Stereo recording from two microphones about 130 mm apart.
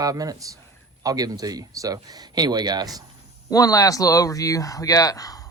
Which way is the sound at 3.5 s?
25° left (ahead or behind).